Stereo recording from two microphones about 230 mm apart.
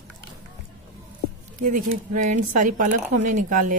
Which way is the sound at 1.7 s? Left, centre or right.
Right.